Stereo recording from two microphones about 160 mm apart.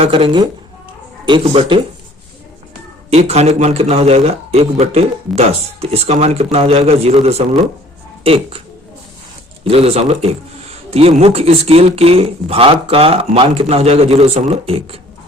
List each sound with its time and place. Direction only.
0.0 s a man's voice: 35° right (ahead or behind)
3.1 s a man's voice: 40° right (ahead or behind)
9.6 s a man's voice: 40° right (ahead or behind)